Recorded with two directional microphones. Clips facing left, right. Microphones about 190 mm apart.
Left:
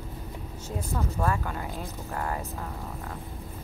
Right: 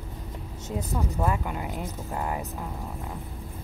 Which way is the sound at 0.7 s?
20° right (ahead or behind).